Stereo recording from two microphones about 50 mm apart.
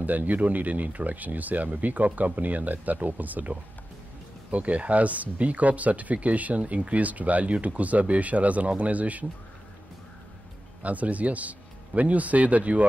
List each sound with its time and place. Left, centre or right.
0.0 s speech: right
10.8 s a man's voice: right